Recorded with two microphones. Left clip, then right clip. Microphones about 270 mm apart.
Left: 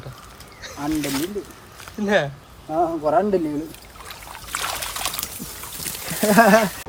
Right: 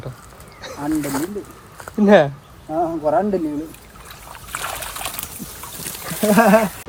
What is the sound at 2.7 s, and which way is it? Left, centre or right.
Speech, centre.